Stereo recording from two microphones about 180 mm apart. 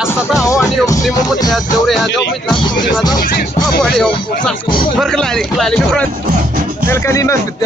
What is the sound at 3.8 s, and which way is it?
Speech, 5° left (ahead or behind).